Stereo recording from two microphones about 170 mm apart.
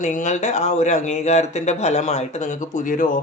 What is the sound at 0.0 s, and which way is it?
Speech, 45° left (ahead or behind).